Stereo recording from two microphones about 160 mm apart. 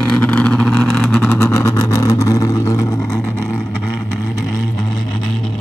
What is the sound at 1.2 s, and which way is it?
Vehicle, 20° left (ahead or behind).